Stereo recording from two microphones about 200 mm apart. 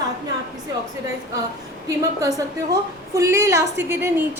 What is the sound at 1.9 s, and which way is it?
A woman's voice, 15° right (ahead or behind).